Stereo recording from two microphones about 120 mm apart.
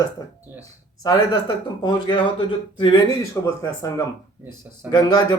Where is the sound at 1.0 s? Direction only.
35° left (ahead or behind).